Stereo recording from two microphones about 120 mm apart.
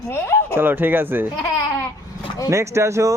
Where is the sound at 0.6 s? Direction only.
15° right (ahead or behind).